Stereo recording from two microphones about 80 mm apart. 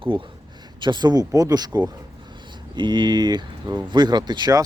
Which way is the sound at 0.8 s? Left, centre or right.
Right.